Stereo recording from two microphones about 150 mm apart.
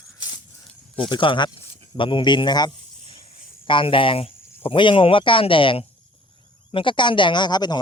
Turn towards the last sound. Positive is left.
turn(degrees=30)  # may be behind; listen again after turning